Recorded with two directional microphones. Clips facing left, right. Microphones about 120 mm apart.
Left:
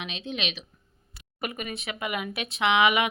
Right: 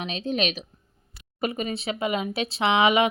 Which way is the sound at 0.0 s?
40° right (ahead or behind).